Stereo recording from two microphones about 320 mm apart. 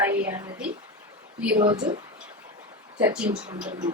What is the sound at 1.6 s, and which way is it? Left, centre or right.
Speech, centre.